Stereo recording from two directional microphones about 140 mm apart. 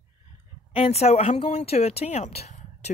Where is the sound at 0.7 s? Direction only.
50° left (ahead or behind).